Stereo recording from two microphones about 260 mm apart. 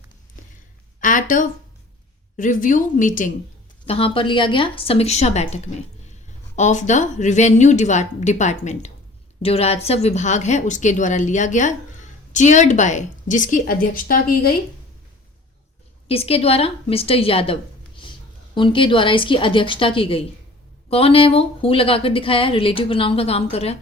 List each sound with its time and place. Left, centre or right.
1.0 s a sound: left
2.3 s a woman's voice: left
16.0 s a woman's voice: left